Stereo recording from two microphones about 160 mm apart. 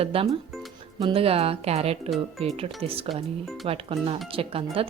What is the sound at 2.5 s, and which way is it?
Speech, 35° right (ahead or behind).